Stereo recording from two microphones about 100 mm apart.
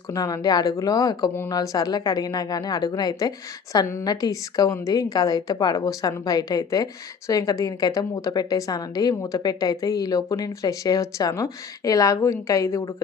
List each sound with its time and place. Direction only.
0.1 s speech: 30° left (ahead or behind)
1.3 s speech: 25° left (ahead or behind)
1.5 s speech: 40° left (ahead or behind)